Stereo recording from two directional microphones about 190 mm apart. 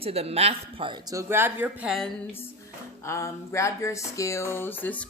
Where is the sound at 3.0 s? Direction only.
15° left (ahead or behind).